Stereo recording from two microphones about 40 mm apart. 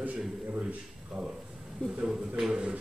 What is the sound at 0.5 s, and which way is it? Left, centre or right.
Speech, right.